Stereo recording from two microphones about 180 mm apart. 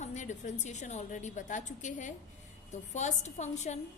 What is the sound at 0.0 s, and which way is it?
A woman's voice, 40° left (ahead or behind).